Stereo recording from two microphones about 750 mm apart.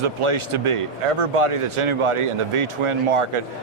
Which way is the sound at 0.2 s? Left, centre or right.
Right.